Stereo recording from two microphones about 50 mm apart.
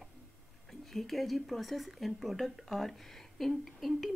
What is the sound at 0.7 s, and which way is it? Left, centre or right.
Speech, centre.